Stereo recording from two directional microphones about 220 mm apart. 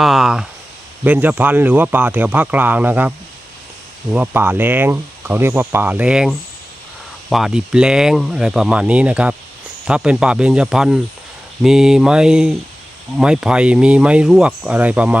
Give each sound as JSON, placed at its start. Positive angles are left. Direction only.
{"t": 0.0, "sound": "speech", "side_deg": 0}
{"t": 4.1, "sound": "speech", "side_deg": -10}